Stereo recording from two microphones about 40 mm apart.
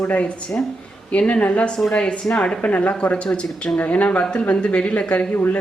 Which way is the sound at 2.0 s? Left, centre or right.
Centre.